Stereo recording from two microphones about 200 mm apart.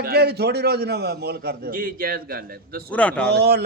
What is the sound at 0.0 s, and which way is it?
A man's voice, 55° right (ahead or behind).